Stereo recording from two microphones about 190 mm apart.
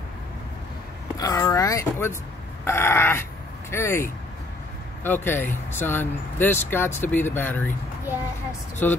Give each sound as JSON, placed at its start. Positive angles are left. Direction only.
{"t": 1.2, "sound": "speech", "side_deg": 20}
{"t": 5.0, "sound": "speech", "side_deg": 10}
{"t": 8.8, "sound": "speech", "side_deg": 10}